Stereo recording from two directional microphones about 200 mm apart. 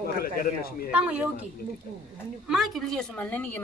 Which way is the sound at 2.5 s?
Centre (ahead or behind).